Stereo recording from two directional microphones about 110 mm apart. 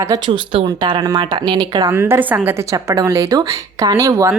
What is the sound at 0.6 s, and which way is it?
A woman's voice, 45° right (ahead or behind).